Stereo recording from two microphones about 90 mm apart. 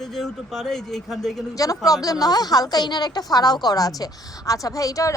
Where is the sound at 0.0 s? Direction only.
5° left (ahead or behind).